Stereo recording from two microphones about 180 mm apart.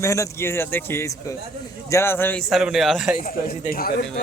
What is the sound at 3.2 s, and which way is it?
Speech, 55° left (ahead or behind).